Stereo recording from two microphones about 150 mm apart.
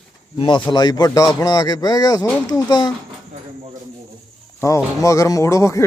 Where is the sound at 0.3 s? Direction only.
35° left (ahead or behind).